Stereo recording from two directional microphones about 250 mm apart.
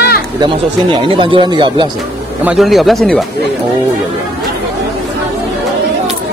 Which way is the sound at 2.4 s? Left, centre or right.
Centre.